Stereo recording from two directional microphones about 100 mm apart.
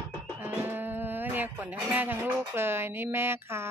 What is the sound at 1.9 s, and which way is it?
Speech, 20° right (ahead or behind).